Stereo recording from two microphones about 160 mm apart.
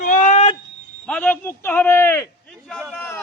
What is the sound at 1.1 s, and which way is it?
Speech, 10° left (ahead or behind).